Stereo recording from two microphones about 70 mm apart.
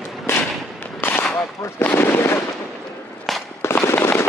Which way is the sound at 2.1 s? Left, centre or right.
Left.